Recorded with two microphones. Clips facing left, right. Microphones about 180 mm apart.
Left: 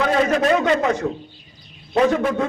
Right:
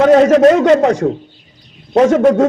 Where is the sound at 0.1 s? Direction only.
75° right (ahead or behind).